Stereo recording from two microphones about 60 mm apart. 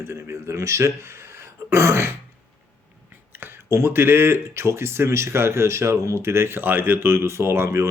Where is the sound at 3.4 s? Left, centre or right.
Right.